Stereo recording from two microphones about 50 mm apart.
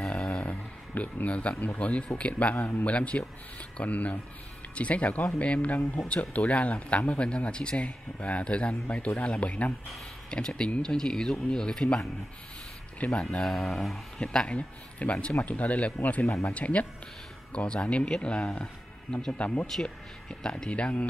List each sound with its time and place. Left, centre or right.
0.2 s a sound: left
1.8 s speech: left
10.3 s speech: centre
13.0 s speech: left
13.5 s speech: centre; by 16.3 s left
16.3 s speech: left
16.5 s speech: left